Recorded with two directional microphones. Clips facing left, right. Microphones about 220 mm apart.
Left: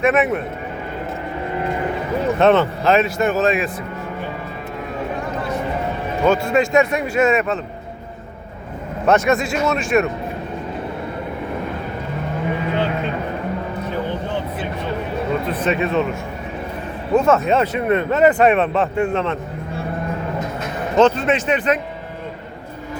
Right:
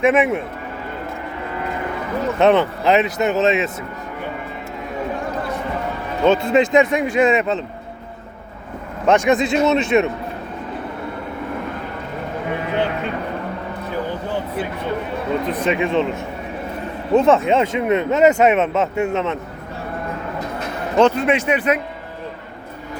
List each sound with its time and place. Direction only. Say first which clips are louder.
0.1 s speech: right 1 dB; 10° right (ahead or behind)
2.4 s speech: right 1 dB; 15° right (ahead or behind)
6.2 s speech: right 2 dB; 20° right (ahead or behind)
9.0 s speech: right 1 dB; 15° right (ahead or behind)
15.4 s speech: even; 15° right (ahead or behind)
17.2 s speech: right 1 dB; 20° right (ahead or behind)
21.0 s speech: even; 10° right (ahead or behind)